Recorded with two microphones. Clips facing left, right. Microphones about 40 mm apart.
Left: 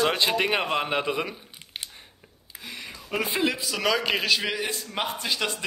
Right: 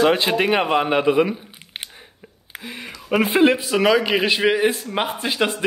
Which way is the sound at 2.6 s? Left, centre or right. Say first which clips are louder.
Right 5 dB; right.